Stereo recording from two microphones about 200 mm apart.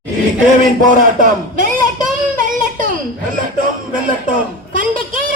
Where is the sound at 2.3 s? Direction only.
40° right (ahead or behind).